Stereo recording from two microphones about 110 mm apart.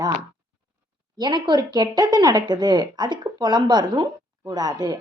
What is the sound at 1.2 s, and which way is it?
Speech, 45° right (ahead or behind).